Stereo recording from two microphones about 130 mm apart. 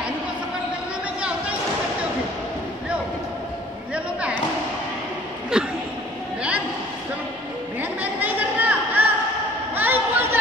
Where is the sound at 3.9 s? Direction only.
10° right (ahead or behind).